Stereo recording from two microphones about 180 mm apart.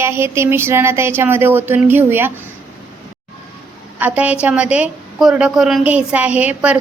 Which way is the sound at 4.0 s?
10° right (ahead or behind).